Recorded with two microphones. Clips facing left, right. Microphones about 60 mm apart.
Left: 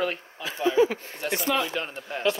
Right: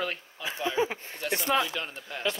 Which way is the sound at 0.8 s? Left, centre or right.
Right.